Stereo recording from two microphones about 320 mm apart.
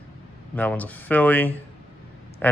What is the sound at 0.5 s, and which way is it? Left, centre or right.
Speech, centre.